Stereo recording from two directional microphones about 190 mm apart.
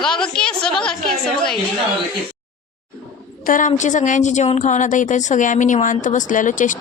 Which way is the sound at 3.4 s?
45° left (ahead or behind).